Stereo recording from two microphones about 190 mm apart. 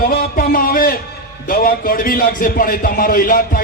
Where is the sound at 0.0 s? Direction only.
50° left (ahead or behind).